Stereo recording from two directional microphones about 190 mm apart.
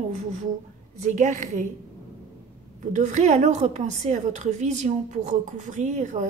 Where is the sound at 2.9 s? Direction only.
40° right (ahead or behind).